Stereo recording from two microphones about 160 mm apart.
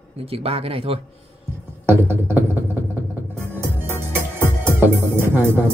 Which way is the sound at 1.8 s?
15° right (ahead or behind).